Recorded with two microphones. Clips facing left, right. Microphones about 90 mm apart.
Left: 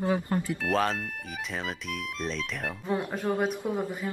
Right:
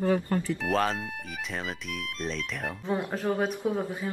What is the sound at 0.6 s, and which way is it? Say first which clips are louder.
Speech: even; centre (ahead or behind).